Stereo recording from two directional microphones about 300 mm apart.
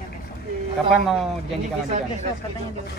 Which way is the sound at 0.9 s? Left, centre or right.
Centre.